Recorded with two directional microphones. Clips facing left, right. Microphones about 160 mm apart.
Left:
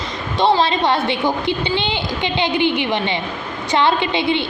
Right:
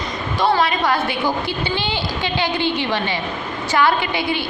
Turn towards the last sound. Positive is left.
turn(degrees=25)  # may be behind; listen again after turning